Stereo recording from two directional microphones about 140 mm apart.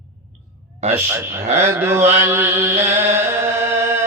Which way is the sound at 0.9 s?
20° right (ahead or behind).